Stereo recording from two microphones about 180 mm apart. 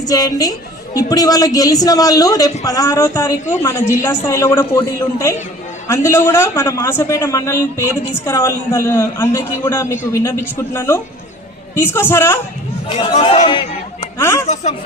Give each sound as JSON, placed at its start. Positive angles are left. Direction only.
{"t": 0.0, "sound": "a man's voice", "side_deg": 20}
{"t": 13.2, "sound": "a man's voice", "side_deg": 30}
{"t": 14.2, "sound": "a man's voice", "side_deg": 15}
{"t": 14.4, "sound": "speech", "side_deg": 40}